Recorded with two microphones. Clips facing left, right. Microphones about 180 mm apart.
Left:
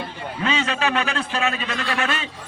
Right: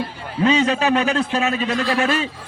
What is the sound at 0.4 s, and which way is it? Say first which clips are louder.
A man's voice: right 6 dB; 40° right (ahead or behind).